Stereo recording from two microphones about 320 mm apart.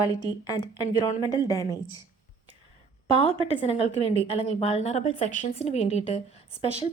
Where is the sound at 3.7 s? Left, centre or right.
Centre.